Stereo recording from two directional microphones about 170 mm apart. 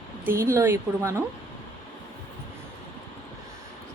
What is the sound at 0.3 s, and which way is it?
Speech, 15° right (ahead or behind).